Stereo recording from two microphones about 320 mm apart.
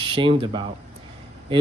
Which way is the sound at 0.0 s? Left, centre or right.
Centre.